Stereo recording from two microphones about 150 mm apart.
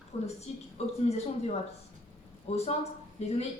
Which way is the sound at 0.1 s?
45° left (ahead or behind).